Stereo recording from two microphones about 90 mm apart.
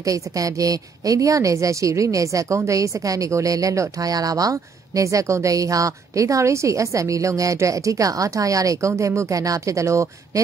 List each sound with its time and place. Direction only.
0.0 s a woman's voice: 40° right (ahead or behind)